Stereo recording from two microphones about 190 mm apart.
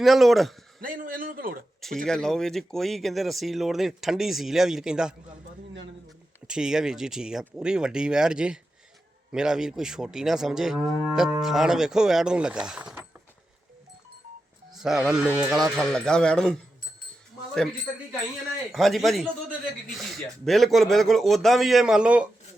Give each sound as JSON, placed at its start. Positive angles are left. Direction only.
{"t": 0.0, "sound": "speech", "side_deg": 0}
{"t": 0.8, "sound": "a sound", "side_deg": -45}
{"t": 2.0, "sound": "speech", "side_deg": 5}
{"t": 6.5, "sound": "speech", "side_deg": -5}
{"t": 14.8, "sound": "speech", "side_deg": 0}
{"t": 18.7, "sound": "speech", "side_deg": 0}